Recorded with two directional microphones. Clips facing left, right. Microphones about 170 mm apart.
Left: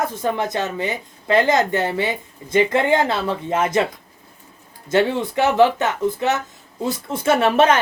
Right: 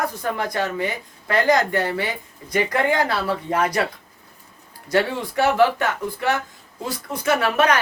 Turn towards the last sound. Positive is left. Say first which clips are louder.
# left 4 dB
turn(degrees=25)  # may be behind; listen again after turning